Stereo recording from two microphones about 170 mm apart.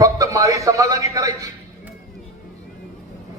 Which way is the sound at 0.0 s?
20° right (ahead or behind).